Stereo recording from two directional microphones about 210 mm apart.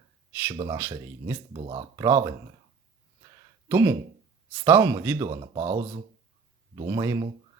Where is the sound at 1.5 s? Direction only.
30° right (ahead or behind).